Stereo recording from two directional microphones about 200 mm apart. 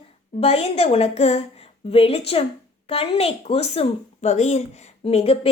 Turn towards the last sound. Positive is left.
turn(degrees=30)  # may be behind; listen again after turning